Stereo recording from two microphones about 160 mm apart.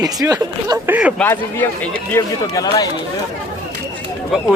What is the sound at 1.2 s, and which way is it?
Speech, 5° left (ahead or behind).